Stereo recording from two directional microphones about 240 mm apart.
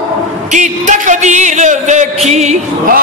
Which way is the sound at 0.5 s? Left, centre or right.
Right.